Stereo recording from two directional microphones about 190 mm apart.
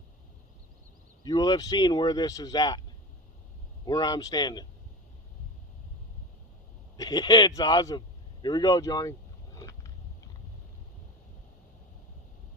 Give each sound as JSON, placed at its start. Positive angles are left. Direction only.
{"t": 1.2, "sound": "speech", "side_deg": 20}
{"t": 3.8, "sound": "speech", "side_deg": 20}
{"t": 6.9, "sound": "a man's voice", "side_deg": 20}
{"t": 9.6, "sound": "vehicle", "side_deg": 15}